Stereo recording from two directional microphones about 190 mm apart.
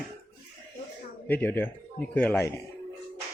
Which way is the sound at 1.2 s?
10° left (ahead or behind).